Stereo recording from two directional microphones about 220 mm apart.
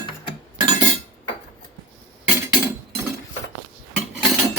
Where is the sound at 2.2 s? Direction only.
10° right (ahead or behind).